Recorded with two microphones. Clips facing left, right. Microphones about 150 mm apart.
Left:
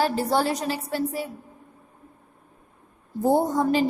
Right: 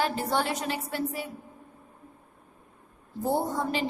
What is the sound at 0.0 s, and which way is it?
A woman's voice, 35° left (ahead or behind).